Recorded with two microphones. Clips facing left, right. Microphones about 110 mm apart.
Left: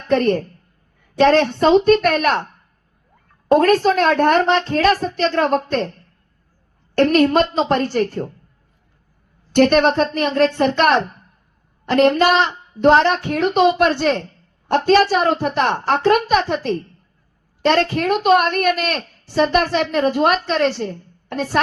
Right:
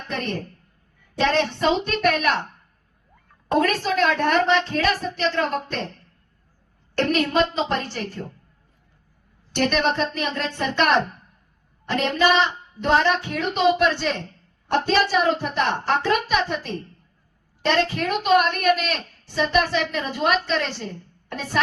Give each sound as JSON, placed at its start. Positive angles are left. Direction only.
{"t": 0.1, "sound": "a child's voice", "side_deg": 50}
{"t": 3.5, "sound": "a child's voice", "side_deg": 50}
{"t": 6.9, "sound": "a child's voice", "side_deg": 50}
{"t": 9.6, "sound": "a child's voice", "side_deg": 50}